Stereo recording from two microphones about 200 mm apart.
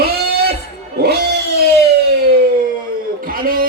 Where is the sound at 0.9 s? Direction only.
55° right (ahead or behind).